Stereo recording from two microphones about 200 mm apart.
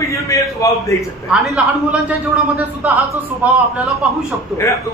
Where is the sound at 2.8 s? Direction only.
5° right (ahead or behind).